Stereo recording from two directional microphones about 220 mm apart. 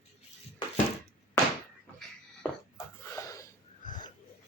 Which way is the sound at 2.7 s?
15° left (ahead or behind).